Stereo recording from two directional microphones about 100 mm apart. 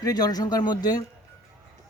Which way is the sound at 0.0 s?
40° left (ahead or behind).